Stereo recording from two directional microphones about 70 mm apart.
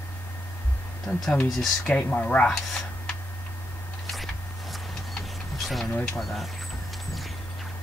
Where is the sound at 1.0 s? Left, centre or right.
Centre.